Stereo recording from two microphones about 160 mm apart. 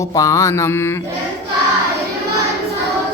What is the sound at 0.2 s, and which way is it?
Mantra, 20° left (ahead or behind).